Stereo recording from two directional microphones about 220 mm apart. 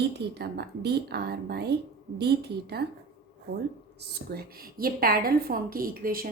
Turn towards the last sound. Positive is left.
turn(degrees=-40)  # may be behind; listen again after turning